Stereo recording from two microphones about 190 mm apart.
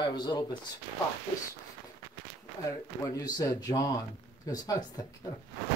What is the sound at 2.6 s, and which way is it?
Speech, 20° left (ahead or behind).